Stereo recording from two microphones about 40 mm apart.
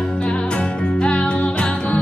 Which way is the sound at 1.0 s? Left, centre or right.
Left.